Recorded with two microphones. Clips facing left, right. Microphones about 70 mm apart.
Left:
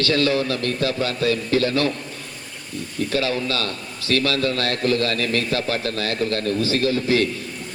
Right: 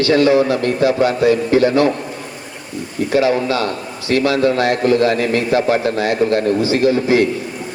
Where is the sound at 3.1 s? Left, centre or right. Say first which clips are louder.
Right 9 dB; right.